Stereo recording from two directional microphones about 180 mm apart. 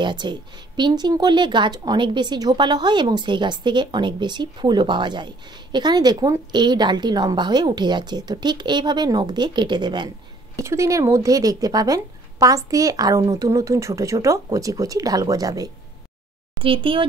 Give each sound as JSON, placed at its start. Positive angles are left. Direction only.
{"t": 0.0, "sound": "speech", "side_deg": -25}